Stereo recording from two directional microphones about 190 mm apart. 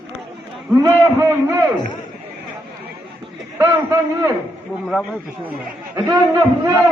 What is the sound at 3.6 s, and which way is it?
Speech, 20° right (ahead or behind).